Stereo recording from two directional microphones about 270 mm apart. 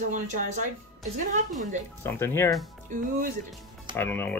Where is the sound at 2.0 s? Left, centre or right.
Centre.